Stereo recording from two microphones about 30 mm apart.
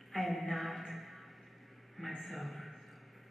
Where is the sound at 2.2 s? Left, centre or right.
Centre.